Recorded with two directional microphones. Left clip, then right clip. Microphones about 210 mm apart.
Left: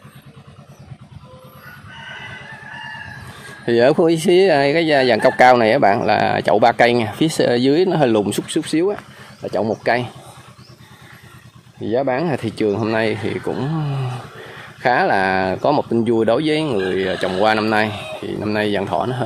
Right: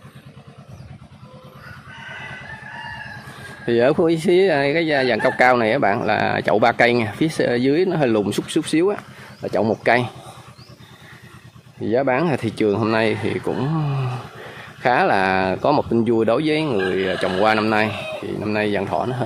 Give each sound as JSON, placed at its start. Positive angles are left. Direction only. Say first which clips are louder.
{"t": 2.0, "sound": "chicken", "louder": "left 1 dB", "side_deg": -45}
{"t": 3.6, "sound": "speech", "louder": "left 3 dB", "side_deg": 10}
{"t": 11.8, "sound": "speech", "louder": "even", "side_deg": -5}